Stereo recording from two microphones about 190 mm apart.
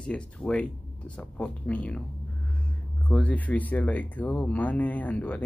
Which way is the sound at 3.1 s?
5° left (ahead or behind).